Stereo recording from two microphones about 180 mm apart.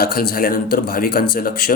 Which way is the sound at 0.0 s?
55° left (ahead or behind).